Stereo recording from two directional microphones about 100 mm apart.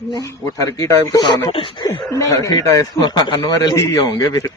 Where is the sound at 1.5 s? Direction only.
60° left (ahead or behind).